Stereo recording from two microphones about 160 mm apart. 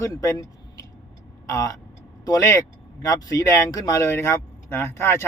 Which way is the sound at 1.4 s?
20° left (ahead or behind).